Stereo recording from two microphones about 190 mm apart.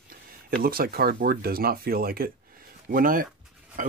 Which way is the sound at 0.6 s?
50° right (ahead or behind).